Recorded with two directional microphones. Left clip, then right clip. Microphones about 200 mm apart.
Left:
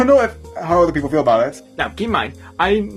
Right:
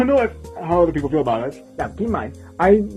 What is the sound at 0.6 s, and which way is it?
Speech, 15° left (ahead or behind).